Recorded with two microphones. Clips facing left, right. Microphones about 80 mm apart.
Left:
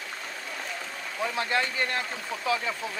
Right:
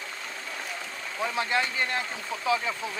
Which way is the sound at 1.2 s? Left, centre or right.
Right.